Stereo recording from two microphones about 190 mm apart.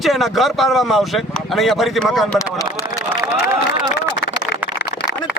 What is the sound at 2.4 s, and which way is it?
Speech, 20° left (ahead or behind).